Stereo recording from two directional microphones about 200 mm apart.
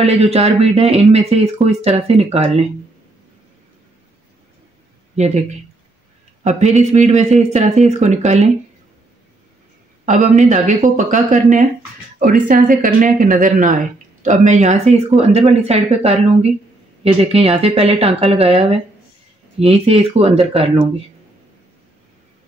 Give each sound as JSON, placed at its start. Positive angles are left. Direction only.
{"t": 0.0, "sound": "speech", "side_deg": -30}
{"t": 5.1, "sound": "speech", "side_deg": -35}
{"t": 6.8, "sound": "speech", "side_deg": -35}
{"t": 10.0, "sound": "speech", "side_deg": -35}